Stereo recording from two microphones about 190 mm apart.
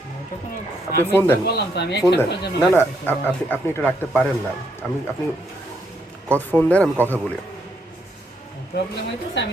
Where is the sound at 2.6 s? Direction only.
10° left (ahead or behind).